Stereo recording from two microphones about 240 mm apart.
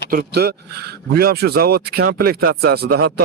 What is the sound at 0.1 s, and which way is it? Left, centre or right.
A man's voice, right.